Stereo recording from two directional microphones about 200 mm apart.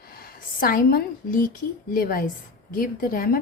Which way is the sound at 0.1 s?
50° left (ahead or behind).